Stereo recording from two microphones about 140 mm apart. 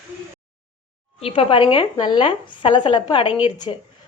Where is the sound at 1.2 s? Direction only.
40° left (ahead or behind).